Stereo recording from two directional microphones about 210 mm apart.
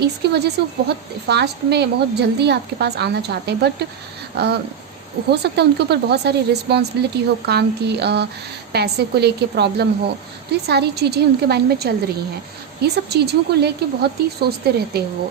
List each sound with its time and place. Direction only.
0.0 s a woman's voice: 50° right (ahead or behind)